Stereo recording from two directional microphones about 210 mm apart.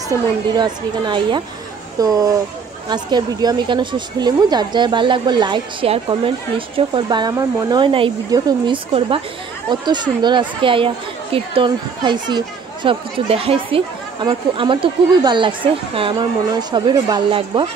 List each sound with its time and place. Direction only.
0.5 s speech: 20° right (ahead or behind)